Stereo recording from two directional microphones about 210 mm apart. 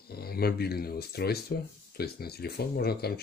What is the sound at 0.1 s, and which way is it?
Speech, 45° left (ahead or behind).